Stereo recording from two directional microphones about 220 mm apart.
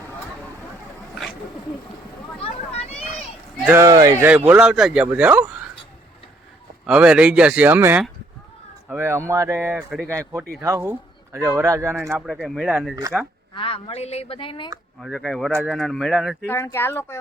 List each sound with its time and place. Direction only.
2.4 s vehicle: 30° left (ahead or behind)
3.7 s speech: 15° right (ahead or behind)
6.8 s speech: 5° right (ahead or behind)
12.1 s speech: centre (ahead or behind)
13.5 s speech: 25° left (ahead or behind)
15.0 s speech: centre (ahead or behind)
16.5 s speech: 10° left (ahead or behind)